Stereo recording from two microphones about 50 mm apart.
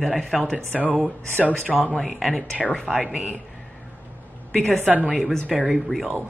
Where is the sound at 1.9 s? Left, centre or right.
Centre.